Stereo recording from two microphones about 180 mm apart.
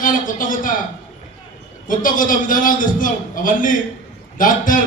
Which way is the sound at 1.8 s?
50° left (ahead or behind).